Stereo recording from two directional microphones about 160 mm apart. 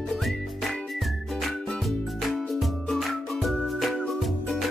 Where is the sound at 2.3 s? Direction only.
Centre (ahead or behind).